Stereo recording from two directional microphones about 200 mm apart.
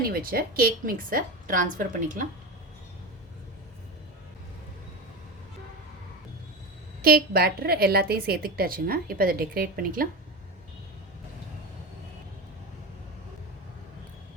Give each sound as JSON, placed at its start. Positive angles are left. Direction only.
{"t": 0.0, "sound": "a woman's voice", "side_deg": -50}
{"t": 7.0, "sound": "a woman's voice", "side_deg": -50}